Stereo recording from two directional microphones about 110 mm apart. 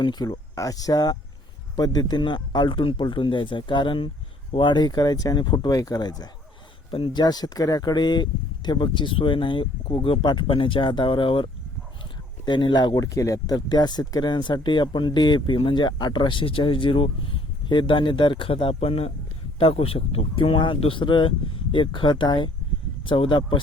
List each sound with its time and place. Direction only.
0.0 s speech: 40° left (ahead or behind)